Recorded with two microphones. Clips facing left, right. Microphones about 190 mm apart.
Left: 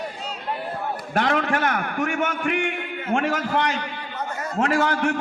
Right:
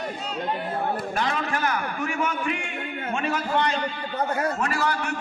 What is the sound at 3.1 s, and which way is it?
Speech, 85° left.